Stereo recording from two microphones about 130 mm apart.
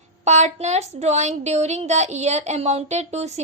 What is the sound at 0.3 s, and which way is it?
A woman's voice, 60° right (ahead or behind).